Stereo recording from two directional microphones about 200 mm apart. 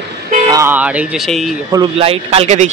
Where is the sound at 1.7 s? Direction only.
25° right (ahead or behind).